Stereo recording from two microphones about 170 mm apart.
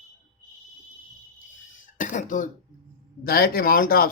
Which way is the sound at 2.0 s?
50° left (ahead or behind).